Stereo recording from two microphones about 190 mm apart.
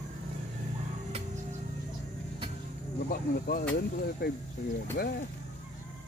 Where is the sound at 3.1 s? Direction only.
50° left (ahead or behind).